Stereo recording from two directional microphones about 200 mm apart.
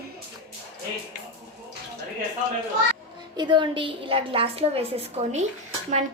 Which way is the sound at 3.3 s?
25° right (ahead or behind).